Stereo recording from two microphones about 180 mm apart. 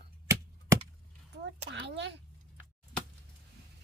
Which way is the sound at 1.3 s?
75° right (ahead or behind).